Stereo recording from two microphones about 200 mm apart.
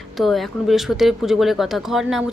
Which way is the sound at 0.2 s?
Centre (ahead or behind).